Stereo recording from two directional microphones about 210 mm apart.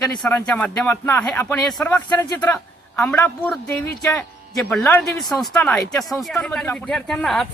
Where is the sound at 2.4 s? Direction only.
10° left (ahead or behind).